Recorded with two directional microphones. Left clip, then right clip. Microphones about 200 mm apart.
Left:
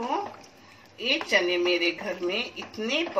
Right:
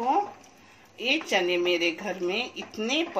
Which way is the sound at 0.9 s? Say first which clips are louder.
Left 1 dB; 45° right (ahead or behind).